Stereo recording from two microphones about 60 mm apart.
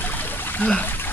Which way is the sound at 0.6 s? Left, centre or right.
Left.